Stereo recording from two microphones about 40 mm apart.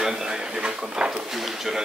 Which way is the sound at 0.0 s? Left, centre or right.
Right.